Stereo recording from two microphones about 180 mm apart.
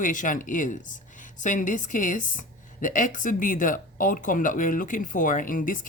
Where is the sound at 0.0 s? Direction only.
45° left (ahead or behind).